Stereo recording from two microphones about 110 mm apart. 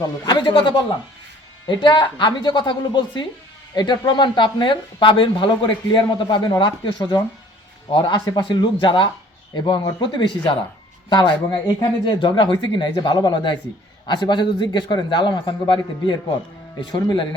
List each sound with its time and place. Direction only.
0.3 s speech: 45° left (ahead or behind)